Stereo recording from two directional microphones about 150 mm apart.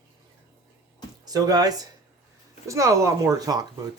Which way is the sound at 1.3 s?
25° right (ahead or behind).